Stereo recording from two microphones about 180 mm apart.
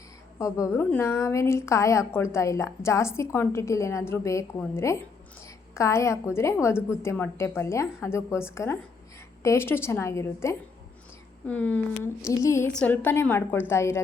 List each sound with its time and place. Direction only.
0.3 s a woman's voice: 15° left (ahead or behind)
12.6 s a woman's voice: 5° left (ahead or behind)